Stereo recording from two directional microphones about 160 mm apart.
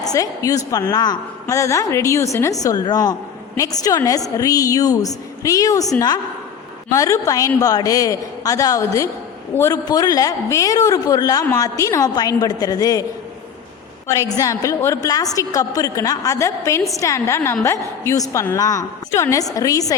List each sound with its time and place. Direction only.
0.0 s a woman's voice: 20° left (ahead or behind)
6.9 s a woman's voice: 20° left (ahead or behind)
14.2 s a woman's voice: 20° left (ahead or behind)